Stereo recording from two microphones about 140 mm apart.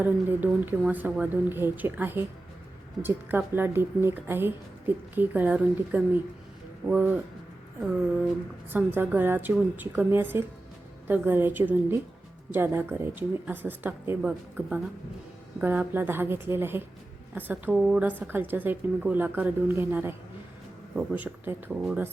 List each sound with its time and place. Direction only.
0.0 s a woman's voice: 10° right (ahead or behind)
8.7 s a woman's voice: 15° right (ahead or behind)